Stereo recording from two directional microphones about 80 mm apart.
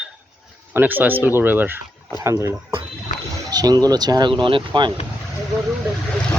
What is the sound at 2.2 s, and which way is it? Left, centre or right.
Speech, right.